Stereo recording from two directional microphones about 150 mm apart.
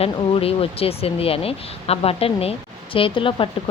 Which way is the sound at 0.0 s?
40° left (ahead or behind).